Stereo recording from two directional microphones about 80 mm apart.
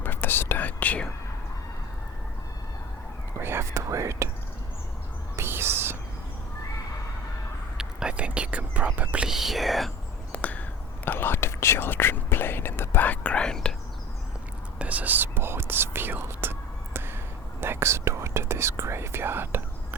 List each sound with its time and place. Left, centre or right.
0.0 s speech: left
3.4 s speech: right
5.4 s whispering: right
7.8 s speech: centre
9.2 s speech: centre
10.3 s a sound: centre
11.0 s speech: left; by 13.7 s centre
14.8 s speech: centre